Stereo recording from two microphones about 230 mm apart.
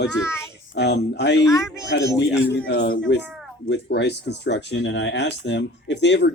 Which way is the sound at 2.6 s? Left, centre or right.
Left.